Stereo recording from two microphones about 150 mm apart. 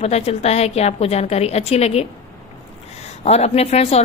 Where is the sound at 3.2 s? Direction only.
45° left (ahead or behind).